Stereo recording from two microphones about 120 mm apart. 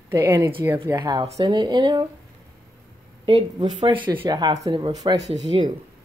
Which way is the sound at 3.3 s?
45° right (ahead or behind).